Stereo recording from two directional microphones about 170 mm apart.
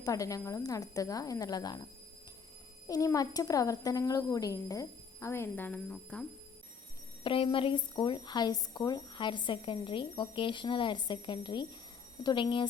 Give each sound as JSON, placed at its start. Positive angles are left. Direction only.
{"t": 0.0, "sound": "a woman's voice", "side_deg": 20}
{"t": 7.3, "sound": "a woman's voice", "side_deg": 30}